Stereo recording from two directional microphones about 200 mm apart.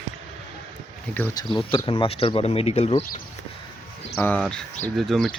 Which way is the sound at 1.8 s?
25° left (ahead or behind).